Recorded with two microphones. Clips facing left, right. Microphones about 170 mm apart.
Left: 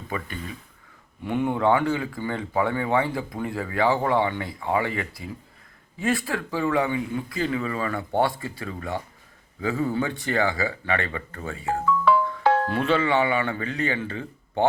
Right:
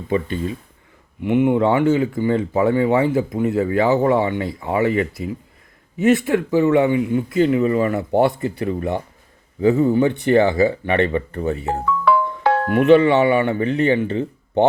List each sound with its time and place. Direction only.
0.1 s speech: 25° right (ahead or behind)
1.2 s speech: 15° right (ahead or behind)
12.0 s music: 60° right (ahead or behind)
12.7 s speech: 20° right (ahead or behind)